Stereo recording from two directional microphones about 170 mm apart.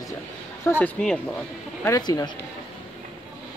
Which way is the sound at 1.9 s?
20° left (ahead or behind).